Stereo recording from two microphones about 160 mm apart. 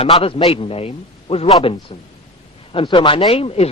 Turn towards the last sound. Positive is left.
turn(degrees=40)  # may be behind; listen again after turning